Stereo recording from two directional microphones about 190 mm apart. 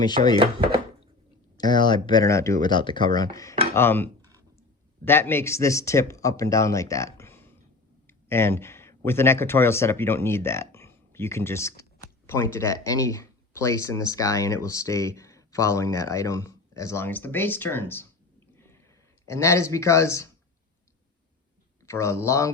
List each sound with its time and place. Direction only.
0.0 s speech: 20° left (ahead or behind)
1.5 s speech: 20° left (ahead or behind)
18.5 s a sound: 15° left (ahead or behind)
19.2 s speech: 15° left (ahead or behind)
21.8 s speech: 15° left (ahead or behind)